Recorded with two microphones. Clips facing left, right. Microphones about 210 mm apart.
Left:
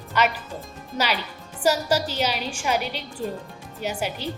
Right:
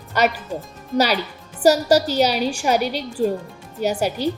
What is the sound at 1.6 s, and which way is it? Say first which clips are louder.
A woman's voice: right 7 dB; 40° right (ahead or behind).